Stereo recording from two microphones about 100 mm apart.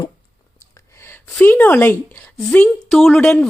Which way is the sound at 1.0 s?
20° left (ahead or behind).